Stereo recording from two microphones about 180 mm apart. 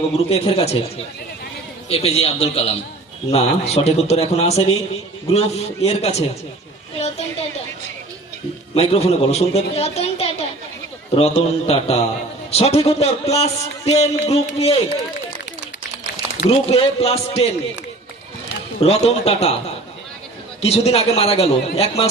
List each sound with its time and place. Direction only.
0.3 s a man's voice: 30° left (ahead or behind)
1.9 s a man's voice: 35° left (ahead or behind)
8.7 s a man's voice: 35° left (ahead or behind)
16.5 s a man's voice: 35° left (ahead or behind)
18.8 s a man's voice: 35° left (ahead or behind)
20.6 s a man's voice: 35° left (ahead or behind)